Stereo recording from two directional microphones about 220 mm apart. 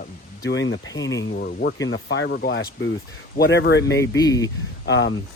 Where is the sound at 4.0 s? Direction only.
15° left (ahead or behind).